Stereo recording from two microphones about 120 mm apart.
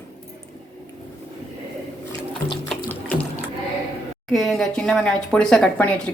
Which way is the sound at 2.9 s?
10° left (ahead or behind).